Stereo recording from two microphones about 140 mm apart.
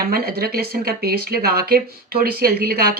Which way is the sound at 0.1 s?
90° right.